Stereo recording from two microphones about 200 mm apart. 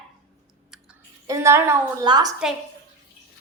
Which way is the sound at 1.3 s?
15° right (ahead or behind).